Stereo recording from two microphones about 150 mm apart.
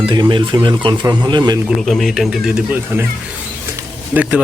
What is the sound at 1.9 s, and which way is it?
Speech, centre (ahead or behind).